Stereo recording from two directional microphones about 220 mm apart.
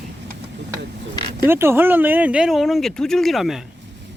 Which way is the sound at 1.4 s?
10° right (ahead or behind).